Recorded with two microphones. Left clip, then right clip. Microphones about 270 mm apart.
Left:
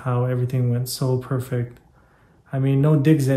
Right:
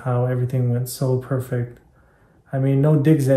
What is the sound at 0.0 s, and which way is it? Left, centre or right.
Speech, centre.